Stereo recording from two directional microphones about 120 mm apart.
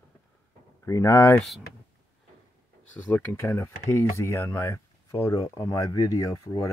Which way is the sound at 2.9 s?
15° left (ahead or behind).